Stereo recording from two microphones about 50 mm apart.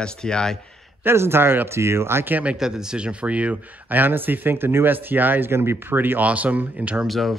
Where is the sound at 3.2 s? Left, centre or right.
Right.